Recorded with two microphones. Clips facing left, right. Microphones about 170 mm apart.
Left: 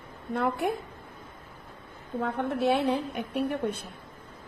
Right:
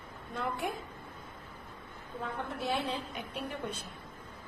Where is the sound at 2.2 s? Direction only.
65° left (ahead or behind).